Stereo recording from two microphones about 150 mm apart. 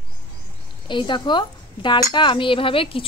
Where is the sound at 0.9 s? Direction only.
30° left (ahead or behind).